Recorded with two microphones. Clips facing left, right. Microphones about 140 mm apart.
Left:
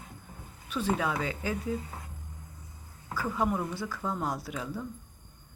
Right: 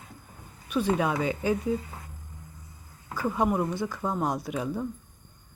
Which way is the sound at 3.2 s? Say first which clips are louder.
Right 4 dB; 20° right (ahead or behind).